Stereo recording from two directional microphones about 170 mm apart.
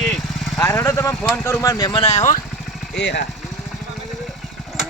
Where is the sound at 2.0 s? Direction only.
40° left (ahead or behind).